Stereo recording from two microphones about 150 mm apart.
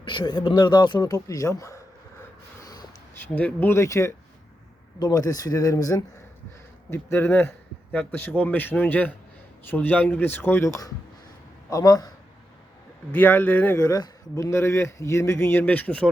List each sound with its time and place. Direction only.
0.0 s speech: 30° left (ahead or behind)
2.6 s a sound: 25° left (ahead or behind)
3.3 s speech: 10° left (ahead or behind)
13.1 s speech: 10° left (ahead or behind)